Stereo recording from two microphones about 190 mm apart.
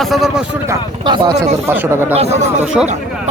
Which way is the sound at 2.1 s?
35° right (ahead or behind).